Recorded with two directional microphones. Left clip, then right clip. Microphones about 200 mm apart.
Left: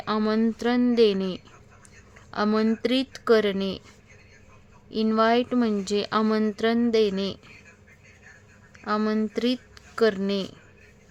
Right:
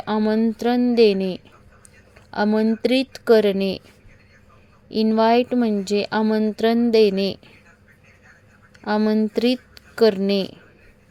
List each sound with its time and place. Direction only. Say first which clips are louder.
0.0 s speech: right 4 dB; 10° right (ahead or behind)
4.9 s speech: right 4 dB; 15° right (ahead or behind)
8.8 s speech: right 5 dB; 15° right (ahead or behind)